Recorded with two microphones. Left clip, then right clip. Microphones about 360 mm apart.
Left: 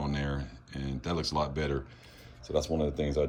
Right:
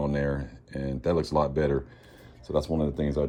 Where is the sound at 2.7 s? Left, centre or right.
Right.